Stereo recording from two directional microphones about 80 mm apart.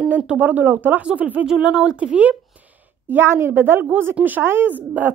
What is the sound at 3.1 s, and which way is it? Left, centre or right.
Speech, right.